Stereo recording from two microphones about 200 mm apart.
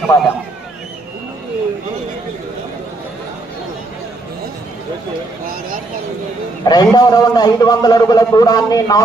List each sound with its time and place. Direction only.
0.1 s a man's voice: 15° left (ahead or behind)
6.7 s a man's voice: 20° left (ahead or behind)